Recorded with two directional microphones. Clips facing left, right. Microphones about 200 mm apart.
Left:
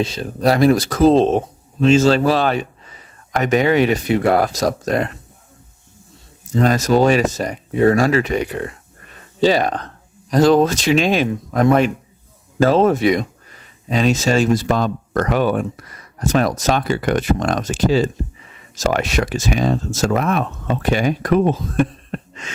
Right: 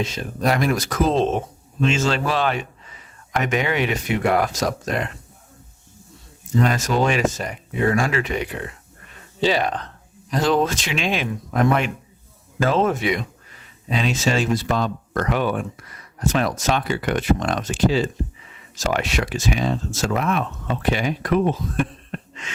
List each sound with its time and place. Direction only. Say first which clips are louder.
0.0 s speech: left 5 dB; 35° left (ahead or behind)
6.6 s speech: left 5 dB; 40° left (ahead or behind)